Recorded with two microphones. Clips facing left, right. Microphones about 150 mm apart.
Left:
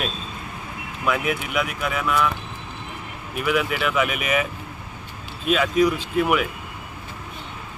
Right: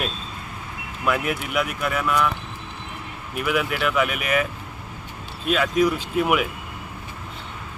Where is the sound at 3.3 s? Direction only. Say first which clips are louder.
Left 1 dB; centre (ahead or behind).